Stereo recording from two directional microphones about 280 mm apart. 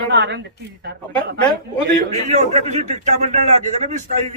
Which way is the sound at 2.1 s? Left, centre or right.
Right.